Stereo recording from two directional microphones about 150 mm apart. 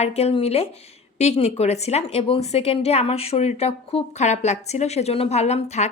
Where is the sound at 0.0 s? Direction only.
45° left (ahead or behind).